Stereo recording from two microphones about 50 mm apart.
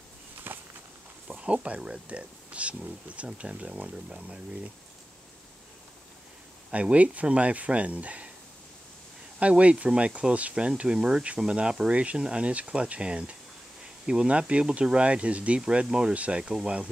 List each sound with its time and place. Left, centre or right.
0.5 s walk: right
1.2 s speech: right
6.7 s speech: right
9.4 s speech: right